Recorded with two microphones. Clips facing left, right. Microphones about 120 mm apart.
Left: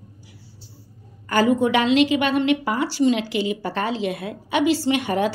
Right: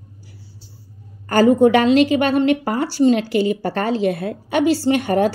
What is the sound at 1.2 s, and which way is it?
A woman's voice, 45° right (ahead or behind).